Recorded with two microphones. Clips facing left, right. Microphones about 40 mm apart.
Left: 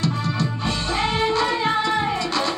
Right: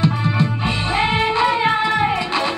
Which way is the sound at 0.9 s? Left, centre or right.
Right.